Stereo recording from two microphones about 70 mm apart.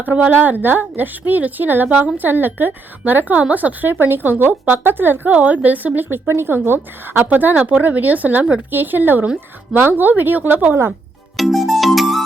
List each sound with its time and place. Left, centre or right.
0.0 s a woman's voice: right
11.3 s music: centre